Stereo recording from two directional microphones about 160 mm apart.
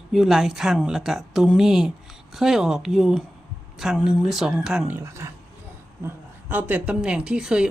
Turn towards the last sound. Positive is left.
turn(degrees=-5)  # may be behind; listen again after turning